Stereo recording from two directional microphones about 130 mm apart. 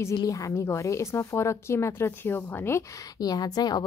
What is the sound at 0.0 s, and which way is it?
Speech, 30° left (ahead or behind).